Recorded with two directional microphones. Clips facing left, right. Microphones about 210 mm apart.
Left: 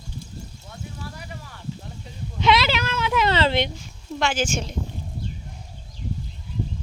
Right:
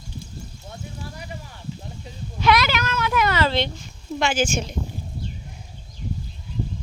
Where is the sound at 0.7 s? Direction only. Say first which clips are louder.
Right 1 dB; 20° right (ahead or behind).